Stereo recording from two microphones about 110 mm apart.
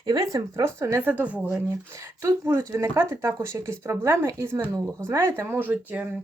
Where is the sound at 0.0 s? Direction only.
35° right (ahead or behind).